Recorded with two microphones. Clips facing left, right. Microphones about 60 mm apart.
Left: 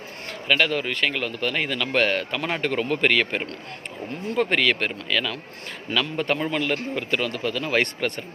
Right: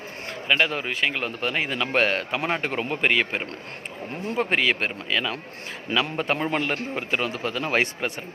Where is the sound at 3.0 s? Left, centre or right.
Centre.